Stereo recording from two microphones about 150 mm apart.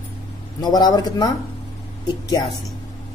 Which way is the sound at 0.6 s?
30° left (ahead or behind).